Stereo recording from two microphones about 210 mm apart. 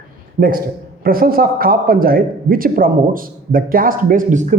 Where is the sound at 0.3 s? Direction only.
45° right (ahead or behind).